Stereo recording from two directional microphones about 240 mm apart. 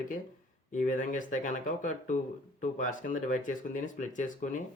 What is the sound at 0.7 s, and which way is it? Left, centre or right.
Speech, left.